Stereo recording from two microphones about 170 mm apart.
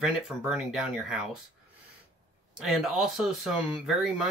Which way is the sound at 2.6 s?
Centre (ahead or behind).